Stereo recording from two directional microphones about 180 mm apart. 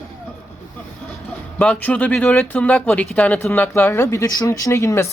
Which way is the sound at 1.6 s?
5° left (ahead or behind).